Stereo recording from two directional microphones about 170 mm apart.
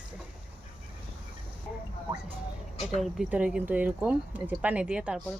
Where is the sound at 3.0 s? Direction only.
5° right (ahead or behind).